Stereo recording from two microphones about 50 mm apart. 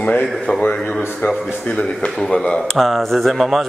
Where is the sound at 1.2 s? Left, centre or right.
Left.